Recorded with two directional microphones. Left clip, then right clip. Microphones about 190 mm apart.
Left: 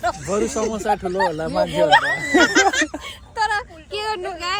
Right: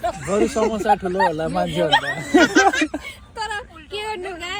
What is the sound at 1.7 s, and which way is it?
Speech, 5° left (ahead or behind).